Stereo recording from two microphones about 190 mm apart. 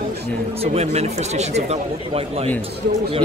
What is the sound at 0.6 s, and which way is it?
Speech, 35° right (ahead or behind).